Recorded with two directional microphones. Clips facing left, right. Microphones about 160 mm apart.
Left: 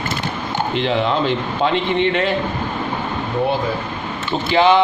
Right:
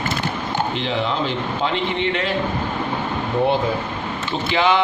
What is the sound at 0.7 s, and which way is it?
A man's voice, 60° left (ahead or behind).